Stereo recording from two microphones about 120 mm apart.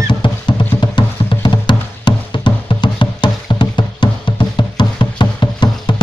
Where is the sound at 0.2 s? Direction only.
40° left (ahead or behind).